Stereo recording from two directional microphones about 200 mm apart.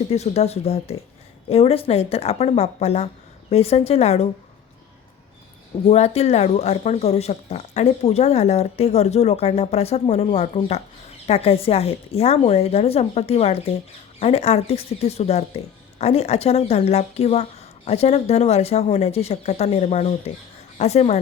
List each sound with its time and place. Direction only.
0.1 s speech: 35° left (ahead or behind)
5.9 s speech: 30° left (ahead or behind)